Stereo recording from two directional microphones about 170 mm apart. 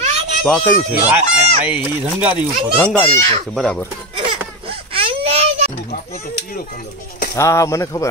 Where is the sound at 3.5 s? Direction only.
Centre (ahead or behind).